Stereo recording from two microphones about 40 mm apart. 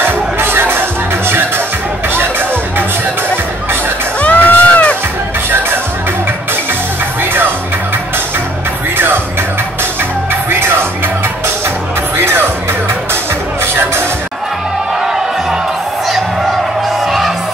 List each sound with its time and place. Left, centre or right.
0.0 s music: right
4.2 s music: left
8.9 s music: right
12.2 s music: right